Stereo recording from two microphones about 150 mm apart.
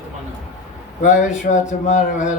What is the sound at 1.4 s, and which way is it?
Speech, 55° left (ahead or behind).